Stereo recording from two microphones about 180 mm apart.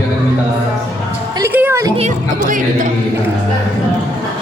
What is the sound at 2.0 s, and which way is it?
Music, 45° right (ahead or behind).